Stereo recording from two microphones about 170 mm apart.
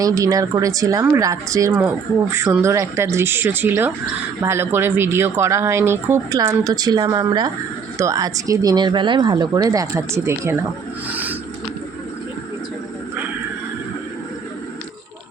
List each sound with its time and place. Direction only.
0.0 s speech: 20° right (ahead or behind)